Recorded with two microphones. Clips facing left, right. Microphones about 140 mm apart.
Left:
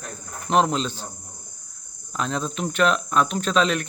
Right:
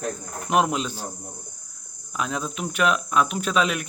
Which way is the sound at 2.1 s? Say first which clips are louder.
Left 2 dB; 5° right (ahead or behind).